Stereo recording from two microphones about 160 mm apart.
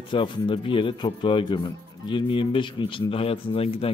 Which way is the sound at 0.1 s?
30° left (ahead or behind).